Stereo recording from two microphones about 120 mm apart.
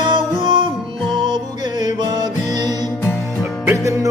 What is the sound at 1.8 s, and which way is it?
Music, 35° right (ahead or behind).